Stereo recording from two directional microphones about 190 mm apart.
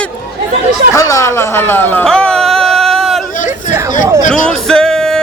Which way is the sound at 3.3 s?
40° left (ahead or behind).